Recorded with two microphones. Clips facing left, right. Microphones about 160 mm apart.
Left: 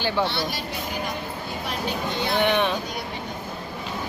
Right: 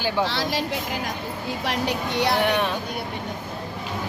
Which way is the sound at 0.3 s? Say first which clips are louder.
Right 2 dB; 90° right.